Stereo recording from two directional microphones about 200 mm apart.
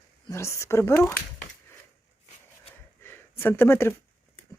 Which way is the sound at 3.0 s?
10° left (ahead or behind).